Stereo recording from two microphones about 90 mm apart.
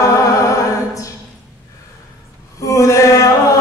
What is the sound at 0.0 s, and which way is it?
Music, 40° left (ahead or behind).